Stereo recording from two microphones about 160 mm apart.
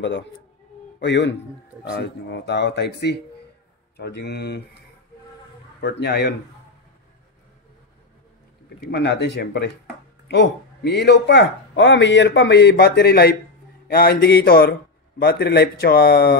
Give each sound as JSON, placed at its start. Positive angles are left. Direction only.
{"t": 0.0, "sound": "a man's voice", "side_deg": 90}
{"t": 5.8, "sound": "speech", "side_deg": 90}
{"t": 8.9, "sound": "a man's voice", "side_deg": 90}